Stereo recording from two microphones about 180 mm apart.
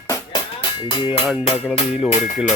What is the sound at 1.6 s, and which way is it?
Speech, centre (ahead or behind).